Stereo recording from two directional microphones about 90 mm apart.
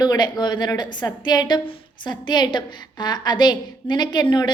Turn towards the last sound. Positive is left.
turn(degrees=55)  # may be behind; listen again after turning